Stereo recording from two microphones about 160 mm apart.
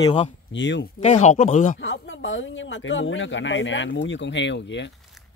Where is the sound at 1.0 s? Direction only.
45° left (ahead or behind).